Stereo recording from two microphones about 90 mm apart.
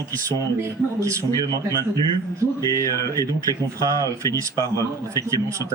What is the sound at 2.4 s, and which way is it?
Speech, 35° right (ahead or behind).